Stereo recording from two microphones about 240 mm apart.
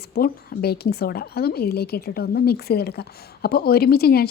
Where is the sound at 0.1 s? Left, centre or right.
Left.